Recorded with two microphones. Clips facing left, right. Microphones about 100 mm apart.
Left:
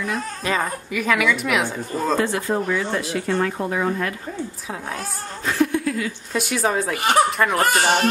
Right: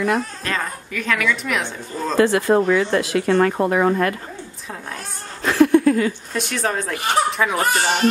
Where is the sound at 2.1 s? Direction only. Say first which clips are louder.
Right 8 dB; 75° right (ahead or behind).